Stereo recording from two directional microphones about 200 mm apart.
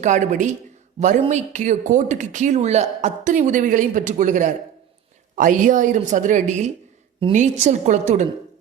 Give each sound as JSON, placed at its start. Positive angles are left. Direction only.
{"t": 0.0, "sound": "speech", "side_deg": -35}